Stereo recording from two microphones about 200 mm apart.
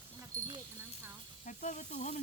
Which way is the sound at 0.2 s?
20° right (ahead or behind).